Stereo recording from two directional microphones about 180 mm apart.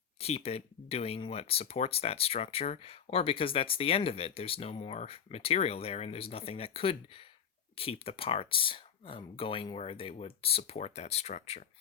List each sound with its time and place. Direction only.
0.2 s speech: 35° left (ahead or behind)